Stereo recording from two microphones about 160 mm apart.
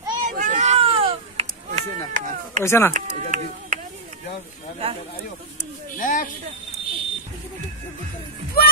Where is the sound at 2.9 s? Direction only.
50° right (ahead or behind).